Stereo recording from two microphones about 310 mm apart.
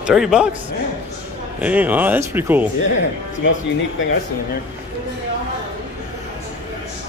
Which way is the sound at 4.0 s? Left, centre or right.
Left.